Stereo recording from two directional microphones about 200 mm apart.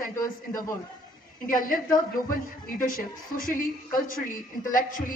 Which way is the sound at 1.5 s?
45° left (ahead or behind).